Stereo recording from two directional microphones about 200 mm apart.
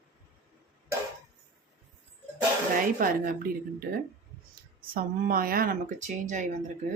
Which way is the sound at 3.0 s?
45° right (ahead or behind).